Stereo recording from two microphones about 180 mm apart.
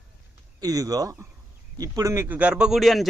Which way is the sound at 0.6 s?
20° right (ahead or behind).